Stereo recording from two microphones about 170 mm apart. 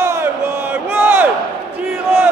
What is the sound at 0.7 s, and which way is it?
Crowd, 10° right (ahead or behind).